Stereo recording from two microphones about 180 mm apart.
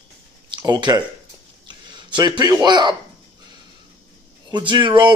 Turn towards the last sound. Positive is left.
turn(degrees=-25)  # may be behind; listen again after turning